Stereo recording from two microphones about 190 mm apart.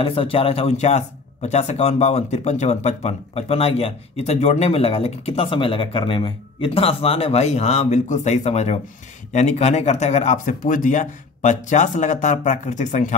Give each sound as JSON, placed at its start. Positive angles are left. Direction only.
{"t": 0.0, "sound": "speech", "side_deg": 30}